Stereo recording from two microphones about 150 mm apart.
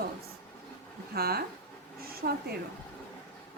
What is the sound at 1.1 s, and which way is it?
Speech, 90° right.